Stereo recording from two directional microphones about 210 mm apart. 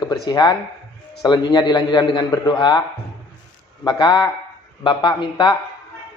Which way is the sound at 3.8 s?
20° left (ahead or behind).